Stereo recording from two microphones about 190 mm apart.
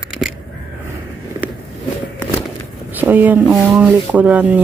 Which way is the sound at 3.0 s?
10° right (ahead or behind).